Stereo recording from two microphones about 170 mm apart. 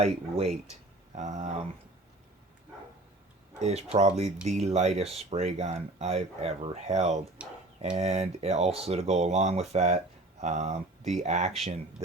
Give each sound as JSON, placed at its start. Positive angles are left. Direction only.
{"t": 0.0, "sound": "speech", "side_deg": -35}
{"t": 1.1, "sound": "speech", "side_deg": -45}
{"t": 3.6, "sound": "speech", "side_deg": -40}
{"t": 7.4, "sound": "speech", "side_deg": -5}
{"t": 7.9, "sound": "speech", "side_deg": -40}